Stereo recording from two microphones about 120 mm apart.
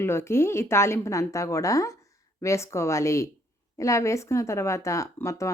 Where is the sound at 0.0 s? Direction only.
20° left (ahead or behind).